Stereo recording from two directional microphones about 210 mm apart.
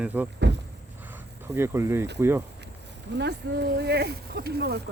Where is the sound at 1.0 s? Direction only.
10° right (ahead or behind).